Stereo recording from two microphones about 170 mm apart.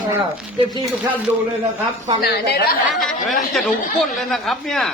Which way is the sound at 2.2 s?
70° left (ahead or behind).